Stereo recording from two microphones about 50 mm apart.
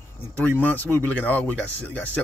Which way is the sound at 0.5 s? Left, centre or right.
Left.